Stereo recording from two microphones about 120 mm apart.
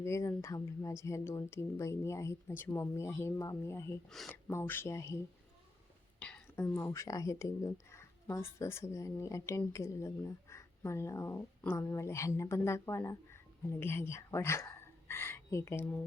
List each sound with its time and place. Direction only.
0.0 s speech: 25° left (ahead or behind)
6.1 s a sound: 10° left (ahead or behind)
6.6 s speech: 20° left (ahead or behind)